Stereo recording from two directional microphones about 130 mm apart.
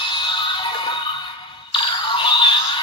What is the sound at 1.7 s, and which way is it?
Synthetic singing, 40° left (ahead or behind).